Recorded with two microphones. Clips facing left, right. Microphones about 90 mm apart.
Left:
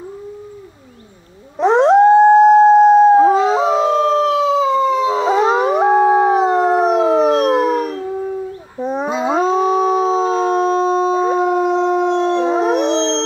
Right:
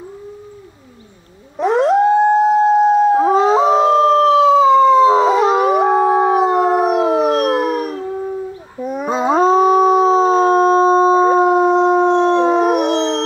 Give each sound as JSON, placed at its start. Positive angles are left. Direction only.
{"t": 1.6, "sound": "howl", "side_deg": 25}
{"t": 3.3, "sound": "howl", "side_deg": -35}
{"t": 5.3, "sound": "howl", "side_deg": 30}
{"t": 6.0, "sound": "howl", "side_deg": -10}
{"t": 8.7, "sound": "a sound", "side_deg": 30}
{"t": 9.1, "sound": "howl", "side_deg": -40}
{"t": 12.5, "sound": "howl", "side_deg": 25}